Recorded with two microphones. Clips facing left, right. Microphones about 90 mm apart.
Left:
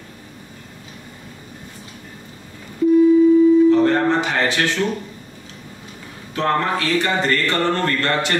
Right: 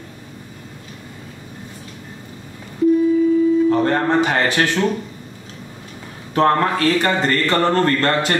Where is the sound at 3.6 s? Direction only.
40° right (ahead or behind).